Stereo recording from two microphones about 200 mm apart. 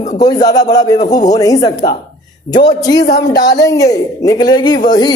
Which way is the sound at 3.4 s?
60° left (ahead or behind).